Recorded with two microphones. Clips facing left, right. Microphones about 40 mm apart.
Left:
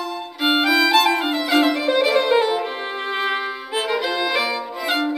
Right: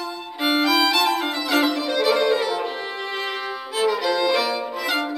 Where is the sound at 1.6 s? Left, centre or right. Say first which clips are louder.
Left 3 dB; left.